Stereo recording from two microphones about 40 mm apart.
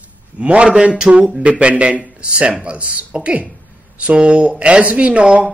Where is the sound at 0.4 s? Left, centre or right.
Right.